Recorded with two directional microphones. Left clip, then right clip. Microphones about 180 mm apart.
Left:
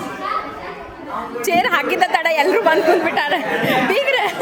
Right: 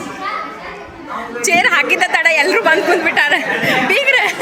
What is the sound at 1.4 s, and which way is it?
A woman's voice, 15° left (ahead or behind).